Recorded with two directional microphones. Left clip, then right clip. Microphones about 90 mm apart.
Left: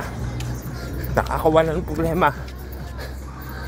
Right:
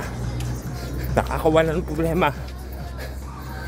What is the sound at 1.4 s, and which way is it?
Speech, 40° right (ahead or behind).